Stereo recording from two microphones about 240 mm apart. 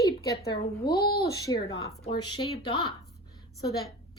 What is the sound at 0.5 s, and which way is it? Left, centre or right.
Speech, left.